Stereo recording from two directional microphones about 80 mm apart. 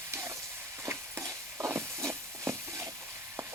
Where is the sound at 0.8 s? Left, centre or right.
Right.